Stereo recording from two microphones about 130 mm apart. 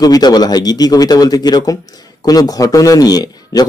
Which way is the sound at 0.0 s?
30° left (ahead or behind).